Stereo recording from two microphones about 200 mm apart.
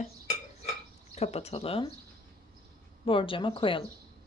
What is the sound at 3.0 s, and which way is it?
Speech, 25° left (ahead or behind).